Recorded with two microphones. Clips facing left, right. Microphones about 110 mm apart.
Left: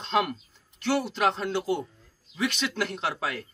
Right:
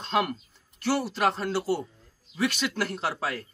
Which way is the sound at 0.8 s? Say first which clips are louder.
Even; 5° right (ahead or behind).